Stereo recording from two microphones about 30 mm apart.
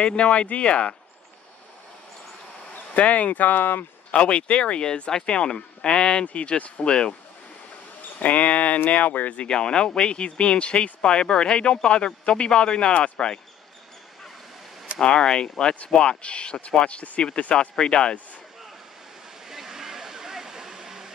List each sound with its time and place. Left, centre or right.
0.0 s speech: left
3.0 s speech: left
4.1 s speech: left
4.8 s speech: left
8.0 s speech: left
9.5 s speech: left
15.0 s speech: left
16.8 s speech: left
17.4 s speech: left
19.5 s a sound: centre